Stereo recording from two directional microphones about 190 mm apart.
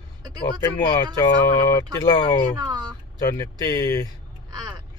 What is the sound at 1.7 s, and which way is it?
Speech, 15° left (ahead or behind).